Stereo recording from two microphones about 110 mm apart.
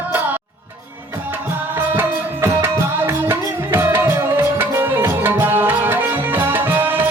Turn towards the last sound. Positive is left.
turn(degrees=-20)  # may be behind; listen again after turning